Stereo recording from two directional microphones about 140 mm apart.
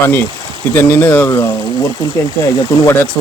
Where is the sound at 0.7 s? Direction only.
15° left (ahead or behind).